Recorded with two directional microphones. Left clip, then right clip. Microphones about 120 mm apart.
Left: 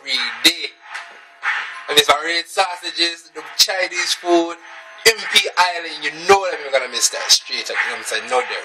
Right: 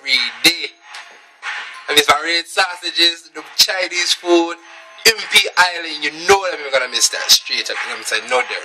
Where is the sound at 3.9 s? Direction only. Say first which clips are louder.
Right 2 dB; centre (ahead or behind).